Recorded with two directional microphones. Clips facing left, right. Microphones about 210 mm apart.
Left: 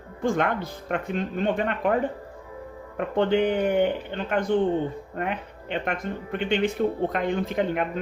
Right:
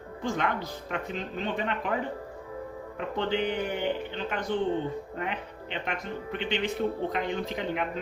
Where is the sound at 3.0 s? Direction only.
50° left (ahead or behind).